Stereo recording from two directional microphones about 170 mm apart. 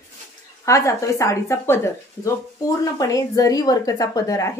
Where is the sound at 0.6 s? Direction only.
20° left (ahead or behind).